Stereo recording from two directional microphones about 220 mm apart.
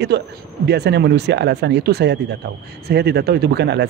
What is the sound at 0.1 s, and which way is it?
Speech, 50° right (ahead or behind).